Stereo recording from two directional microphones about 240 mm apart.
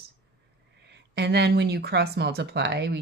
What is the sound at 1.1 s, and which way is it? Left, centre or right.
Speech, right.